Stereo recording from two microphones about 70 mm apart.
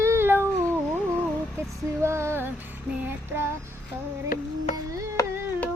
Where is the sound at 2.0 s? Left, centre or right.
Right.